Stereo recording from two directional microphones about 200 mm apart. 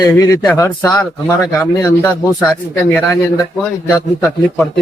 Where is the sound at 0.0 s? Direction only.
20° left (ahead or behind).